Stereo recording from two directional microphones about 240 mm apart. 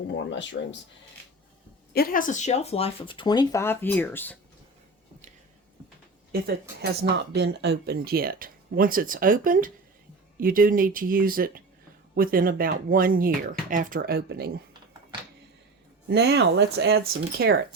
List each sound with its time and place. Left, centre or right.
0.1 s speech: left
1.9 s speech: left; by 4.4 s centre
6.3 s speech: right
16.0 s speech: right